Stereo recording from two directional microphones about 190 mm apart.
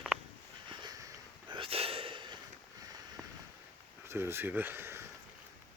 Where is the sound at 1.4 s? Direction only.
25° right (ahead or behind).